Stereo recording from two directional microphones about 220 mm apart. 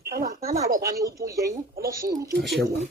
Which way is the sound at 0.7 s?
40° right (ahead or behind).